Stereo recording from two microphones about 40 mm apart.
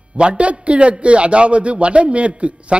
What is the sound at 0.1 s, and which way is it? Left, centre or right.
A man's voice, right.